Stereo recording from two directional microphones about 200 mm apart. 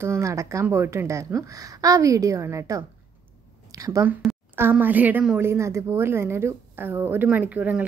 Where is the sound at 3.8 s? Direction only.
15° right (ahead or behind).